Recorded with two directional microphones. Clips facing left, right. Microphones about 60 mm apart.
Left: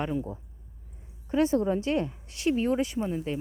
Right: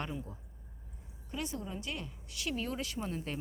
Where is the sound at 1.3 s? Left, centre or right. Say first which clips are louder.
Left 15 dB; left.